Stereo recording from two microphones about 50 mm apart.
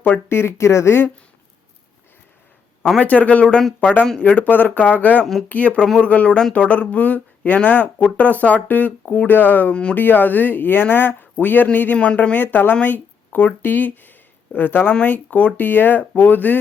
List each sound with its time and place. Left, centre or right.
0.3 s speech: left
3.0 s speech: left
5.2 s speech: centre
5.5 s speech: left
11.9 s speech: left